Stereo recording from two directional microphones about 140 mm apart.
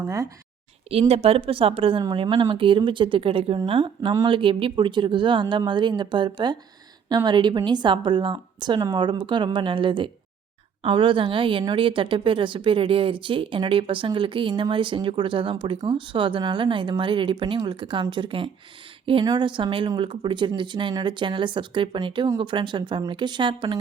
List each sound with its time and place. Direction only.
0.9 s speech: 45° right (ahead or behind)